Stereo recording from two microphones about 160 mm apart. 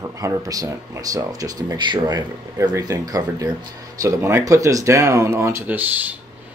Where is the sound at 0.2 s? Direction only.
20° right (ahead or behind).